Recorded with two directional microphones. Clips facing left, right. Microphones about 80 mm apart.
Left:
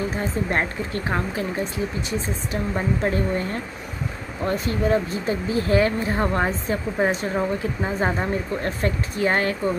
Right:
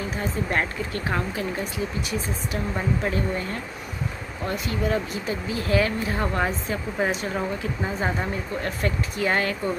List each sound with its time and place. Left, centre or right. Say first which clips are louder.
0.5 s speech: left 2 dB; left